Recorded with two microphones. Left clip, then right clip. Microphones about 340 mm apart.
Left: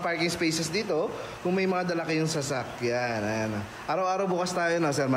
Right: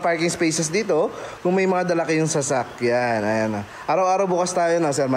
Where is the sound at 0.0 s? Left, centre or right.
Centre.